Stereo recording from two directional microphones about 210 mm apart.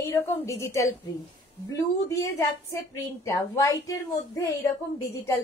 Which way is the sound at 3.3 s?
15° left (ahead or behind).